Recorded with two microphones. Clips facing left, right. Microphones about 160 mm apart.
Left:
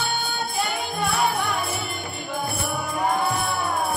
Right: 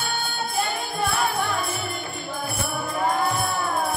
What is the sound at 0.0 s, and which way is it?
Music, 20° left (ahead or behind).